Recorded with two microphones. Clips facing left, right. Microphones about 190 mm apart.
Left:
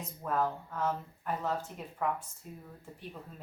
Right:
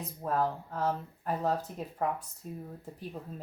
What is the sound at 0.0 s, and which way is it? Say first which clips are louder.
A woman's voice: right 2 dB; 35° right (ahead or behind).